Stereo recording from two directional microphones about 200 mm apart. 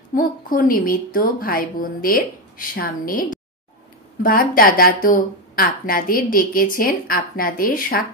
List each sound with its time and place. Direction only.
0.1 s a woman's voice: 45° left (ahead or behind)